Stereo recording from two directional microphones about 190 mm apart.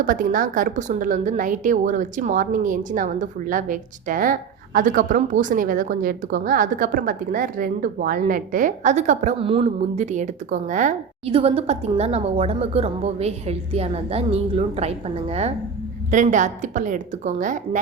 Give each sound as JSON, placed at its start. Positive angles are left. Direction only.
{"t": 0.0, "sound": "a woman's voice", "side_deg": -45}
{"t": 11.3, "sound": "a woman's voice", "side_deg": -30}